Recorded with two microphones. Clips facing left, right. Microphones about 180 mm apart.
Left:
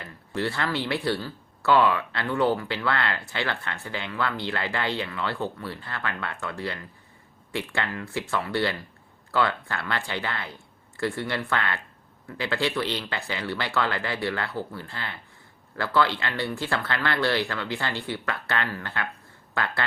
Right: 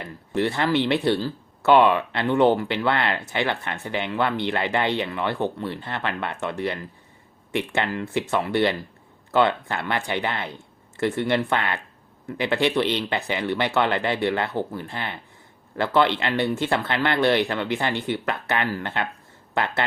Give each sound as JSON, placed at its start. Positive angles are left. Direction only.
{"t": 0.0, "sound": "speech", "side_deg": -20}